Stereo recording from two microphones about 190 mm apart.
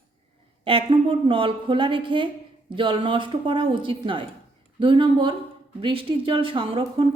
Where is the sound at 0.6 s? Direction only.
30° right (ahead or behind).